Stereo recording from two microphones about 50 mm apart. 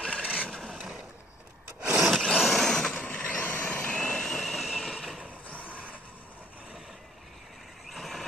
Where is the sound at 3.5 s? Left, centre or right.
Left.